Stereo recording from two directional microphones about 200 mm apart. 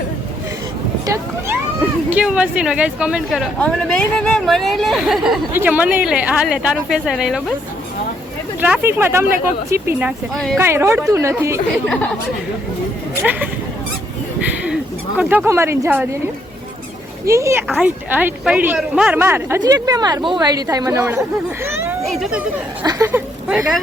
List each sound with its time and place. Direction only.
1.0 s speech: 15° right (ahead or behind)
8.6 s speech: 10° right (ahead or behind)
10.6 s speech: 10° right (ahead or behind)
15.2 s speech: 10° right (ahead or behind)
22.0 s speech: centre (ahead or behind)